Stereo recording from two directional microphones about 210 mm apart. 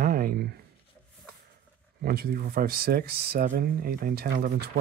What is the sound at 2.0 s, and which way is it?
Speech, 45° right (ahead or behind).